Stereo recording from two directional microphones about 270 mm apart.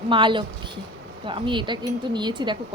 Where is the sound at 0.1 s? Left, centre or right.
Centre.